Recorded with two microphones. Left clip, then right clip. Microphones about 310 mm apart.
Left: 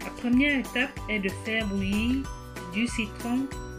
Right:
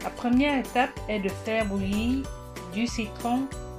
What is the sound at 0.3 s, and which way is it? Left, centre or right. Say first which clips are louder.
Speech: right 1 dB; right.